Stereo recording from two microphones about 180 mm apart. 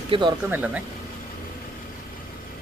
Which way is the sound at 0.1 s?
25° right (ahead or behind).